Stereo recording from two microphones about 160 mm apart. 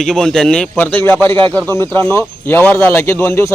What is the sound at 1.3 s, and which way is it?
Speech, 30° right (ahead or behind).